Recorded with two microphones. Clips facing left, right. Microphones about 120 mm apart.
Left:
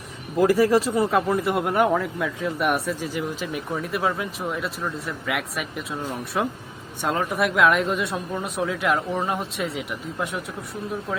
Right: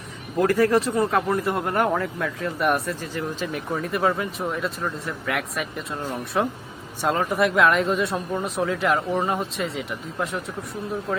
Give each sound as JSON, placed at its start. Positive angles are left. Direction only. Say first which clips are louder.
{"t": 0.3, "sound": "speech", "louder": "left 1 dB", "side_deg": 10}